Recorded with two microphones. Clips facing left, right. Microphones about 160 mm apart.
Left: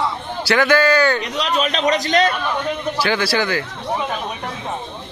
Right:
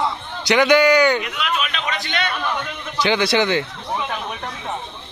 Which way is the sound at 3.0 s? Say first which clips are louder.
Right 3 dB; 20° right (ahead or behind).